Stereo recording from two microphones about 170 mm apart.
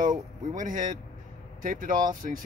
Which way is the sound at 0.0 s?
50° right (ahead or behind).